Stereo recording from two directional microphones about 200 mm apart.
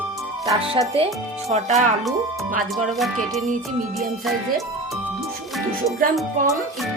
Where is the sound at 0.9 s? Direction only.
30° right (ahead or behind).